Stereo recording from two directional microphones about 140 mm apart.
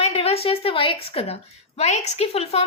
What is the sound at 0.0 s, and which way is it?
A woman's voice, 45° left (ahead or behind).